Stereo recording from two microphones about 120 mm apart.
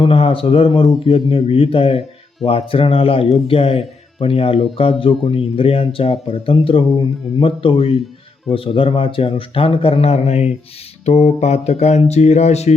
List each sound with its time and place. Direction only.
0.0 s speech: 50° left (ahead or behind); by 12.7 s 65° left (ahead or behind)